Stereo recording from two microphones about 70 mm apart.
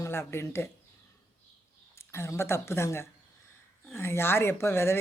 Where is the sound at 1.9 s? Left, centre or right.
Left.